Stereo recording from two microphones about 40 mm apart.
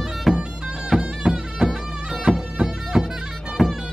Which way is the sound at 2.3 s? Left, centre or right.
Centre.